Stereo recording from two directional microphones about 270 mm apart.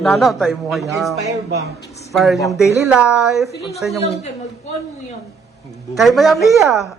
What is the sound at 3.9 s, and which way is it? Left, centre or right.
Speech, left.